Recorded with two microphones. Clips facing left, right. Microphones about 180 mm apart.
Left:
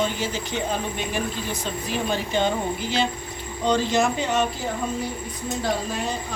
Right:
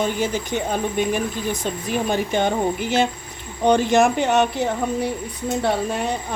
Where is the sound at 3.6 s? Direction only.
60° right (ahead or behind).